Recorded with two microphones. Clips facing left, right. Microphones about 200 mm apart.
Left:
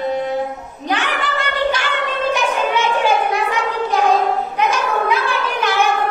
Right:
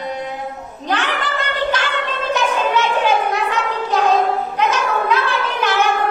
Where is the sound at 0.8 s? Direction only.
10° left (ahead or behind).